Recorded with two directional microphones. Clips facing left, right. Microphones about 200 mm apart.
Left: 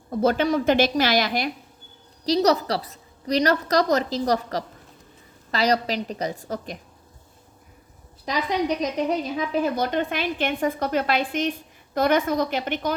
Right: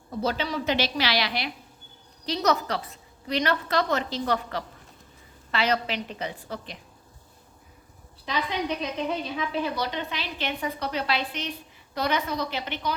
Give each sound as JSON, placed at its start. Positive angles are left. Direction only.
{"t": 0.1, "sound": "a woman's voice", "side_deg": 50}
{"t": 8.2, "sound": "a woman's voice", "side_deg": 40}